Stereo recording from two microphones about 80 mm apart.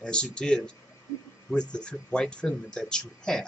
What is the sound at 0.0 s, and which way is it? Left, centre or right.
Speech, centre.